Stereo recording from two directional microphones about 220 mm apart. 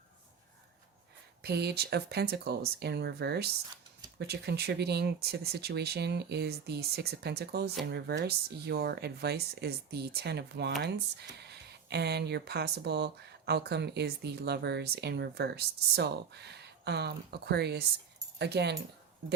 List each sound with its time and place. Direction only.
1.4 s speech: 45° right (ahead or behind)